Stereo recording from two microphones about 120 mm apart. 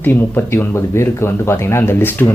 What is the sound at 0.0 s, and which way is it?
Speech, 15° left (ahead or behind).